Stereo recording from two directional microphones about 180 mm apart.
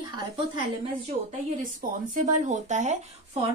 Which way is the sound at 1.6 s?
50° right (ahead or behind).